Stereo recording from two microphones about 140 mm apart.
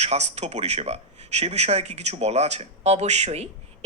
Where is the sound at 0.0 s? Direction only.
50° right (ahead or behind).